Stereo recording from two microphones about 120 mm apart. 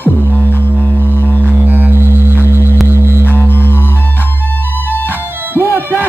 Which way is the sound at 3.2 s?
15° left (ahead or behind).